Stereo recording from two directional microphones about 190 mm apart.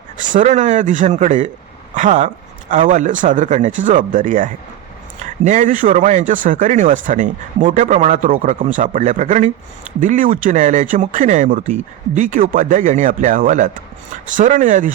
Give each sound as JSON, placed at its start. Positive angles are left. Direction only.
{"t": 0.2, "sound": "speech", "side_deg": -40}